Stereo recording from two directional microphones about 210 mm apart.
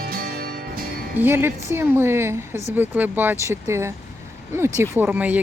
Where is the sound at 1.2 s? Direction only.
10° right (ahead or behind).